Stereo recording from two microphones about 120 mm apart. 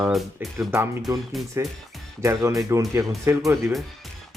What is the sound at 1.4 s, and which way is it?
Speech, centre (ahead or behind).